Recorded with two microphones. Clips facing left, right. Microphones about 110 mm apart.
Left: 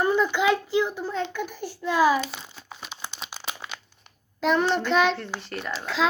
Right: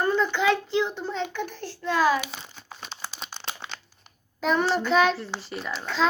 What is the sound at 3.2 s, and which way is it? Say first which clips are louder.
A child's voice: left 1 dB; 5° left (ahead or behind).